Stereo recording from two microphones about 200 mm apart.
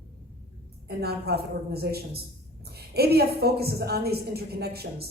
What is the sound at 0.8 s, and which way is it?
A woman's voice, 50° right (ahead or behind).